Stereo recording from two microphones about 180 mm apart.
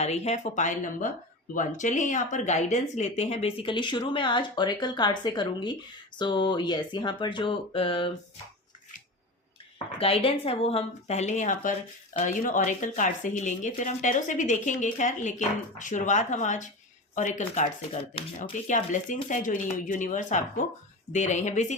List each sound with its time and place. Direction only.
0.0 s speech: 35° left (ahead or behind)
9.7 s speech: 30° left (ahead or behind)